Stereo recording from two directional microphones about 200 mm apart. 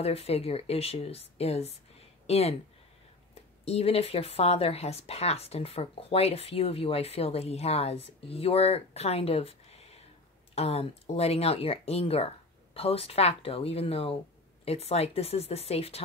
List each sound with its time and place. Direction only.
0.0 s speech: 30° left (ahead or behind)
3.6 s speech: 30° left (ahead or behind)